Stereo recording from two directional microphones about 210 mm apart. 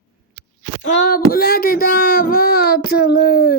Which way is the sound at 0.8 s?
40° left (ahead or behind).